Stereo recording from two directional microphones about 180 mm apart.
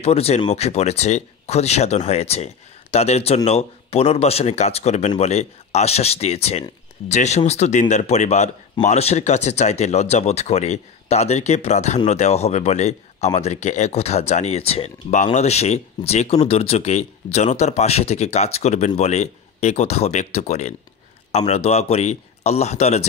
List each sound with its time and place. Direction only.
0.0 s speech: 35° left (ahead or behind)